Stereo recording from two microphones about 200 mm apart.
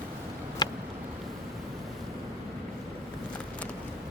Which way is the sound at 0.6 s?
20° left (ahead or behind).